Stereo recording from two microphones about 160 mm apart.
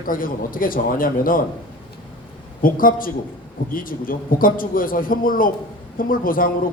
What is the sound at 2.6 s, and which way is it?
A woman's voice, 60° left (ahead or behind).